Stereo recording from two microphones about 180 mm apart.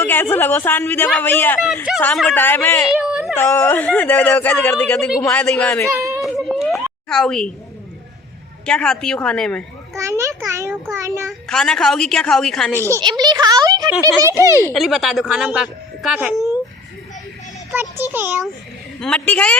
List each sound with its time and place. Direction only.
0.0 s speech: 10° left (ahead or behind)
1.6 s a woman's voice: centre (ahead or behind)
3.0 s a sound: 5° right (ahead or behind)
3.3 s a woman's voice: 10° left (ahead or behind)
6.1 s a sound: centre (ahead or behind)
7.1 s a woman's voice: 5° left (ahead or behind)
8.6 s a woman's voice: 5° left (ahead or behind)
9.9 s a child's voice: 15° right (ahead or behind)
11.3 s a woman's voice: 5° left (ahead or behind)
12.7 s speech: 15° right (ahead or behind)
14.3 s speech: 15° left (ahead or behind)
14.7 s a woman's voice: centre (ahead or behind)
18.9 s a woman's voice: 5° left (ahead or behind)